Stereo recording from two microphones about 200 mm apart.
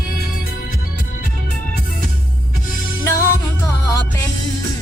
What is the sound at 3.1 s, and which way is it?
Music, 15° left (ahead or behind).